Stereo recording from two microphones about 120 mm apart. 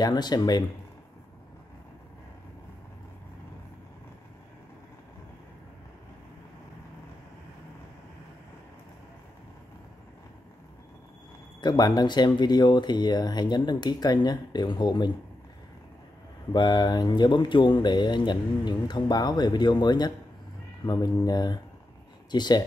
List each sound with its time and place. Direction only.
0.0 s speech: 35° left (ahead or behind)
11.6 s speech: 35° left (ahead or behind)
16.5 s speech: 35° left (ahead or behind)